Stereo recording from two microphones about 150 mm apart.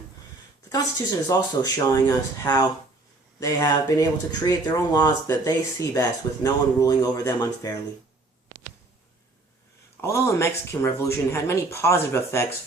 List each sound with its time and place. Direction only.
1.3 s speech: 25° left (ahead or behind)
10.0 s speech: 20° left (ahead or behind)